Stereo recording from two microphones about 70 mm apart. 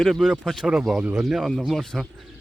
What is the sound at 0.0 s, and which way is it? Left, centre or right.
Speech, centre.